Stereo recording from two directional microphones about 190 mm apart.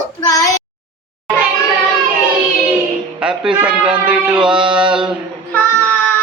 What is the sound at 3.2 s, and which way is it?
A man's voice, 5° right (ahead or behind).